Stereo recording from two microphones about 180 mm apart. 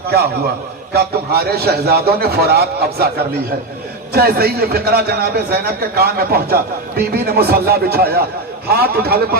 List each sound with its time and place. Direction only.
0.9 s a man's voice: 60° right (ahead or behind)